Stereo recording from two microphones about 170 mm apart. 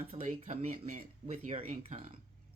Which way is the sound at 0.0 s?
40° right (ahead or behind).